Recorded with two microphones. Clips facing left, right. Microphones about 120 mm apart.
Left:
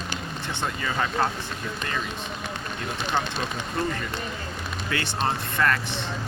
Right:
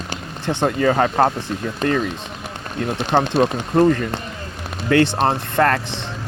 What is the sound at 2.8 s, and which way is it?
Speech, 55° right (ahead or behind).